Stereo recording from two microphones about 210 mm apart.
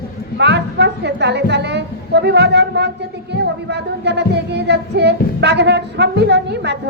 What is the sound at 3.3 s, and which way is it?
Child singing, 55° right (ahead or behind).